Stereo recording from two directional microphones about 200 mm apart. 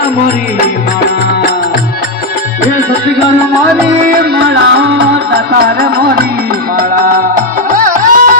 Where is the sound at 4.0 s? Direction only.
45° right (ahead or behind).